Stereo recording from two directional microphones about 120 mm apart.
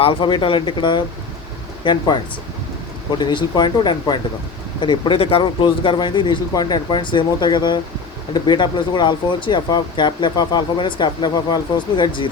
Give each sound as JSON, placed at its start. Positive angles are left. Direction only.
{"t": 0.0, "sound": "speech", "side_deg": 45}
{"t": 3.2, "sound": "speech", "side_deg": 40}